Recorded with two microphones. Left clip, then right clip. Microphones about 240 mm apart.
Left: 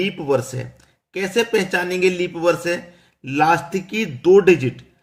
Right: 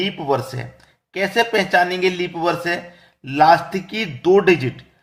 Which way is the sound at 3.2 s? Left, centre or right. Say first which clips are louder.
Right 4 dB; centre.